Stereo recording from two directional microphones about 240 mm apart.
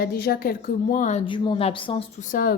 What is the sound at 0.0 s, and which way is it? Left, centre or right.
A woman's voice, left.